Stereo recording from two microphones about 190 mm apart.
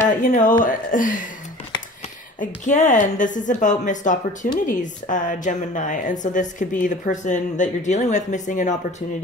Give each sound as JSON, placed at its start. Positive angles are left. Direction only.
{"t": 0.0, "sound": "speech", "side_deg": 40}
{"t": 2.6, "sound": "speech", "side_deg": 40}